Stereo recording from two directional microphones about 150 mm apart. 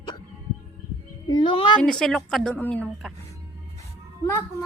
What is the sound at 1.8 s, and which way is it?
A woman's voice, 5° left (ahead or behind).